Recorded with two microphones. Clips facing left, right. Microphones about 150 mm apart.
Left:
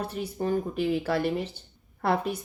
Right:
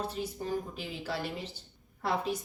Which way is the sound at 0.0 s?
60° left (ahead or behind).